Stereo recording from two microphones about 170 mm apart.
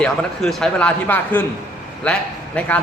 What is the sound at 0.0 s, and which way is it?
A man's voice, 5° left (ahead or behind).